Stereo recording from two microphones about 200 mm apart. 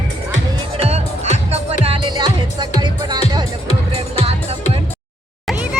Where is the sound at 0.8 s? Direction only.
30° right (ahead or behind).